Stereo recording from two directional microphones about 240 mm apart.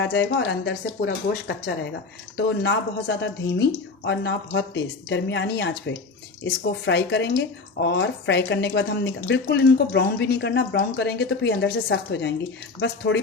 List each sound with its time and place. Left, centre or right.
0.0 s speech: left